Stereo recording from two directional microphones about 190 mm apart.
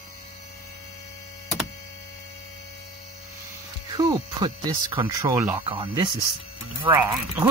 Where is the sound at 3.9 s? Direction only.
20° right (ahead or behind).